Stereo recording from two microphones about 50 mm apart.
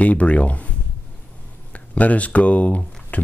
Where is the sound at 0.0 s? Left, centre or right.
Left.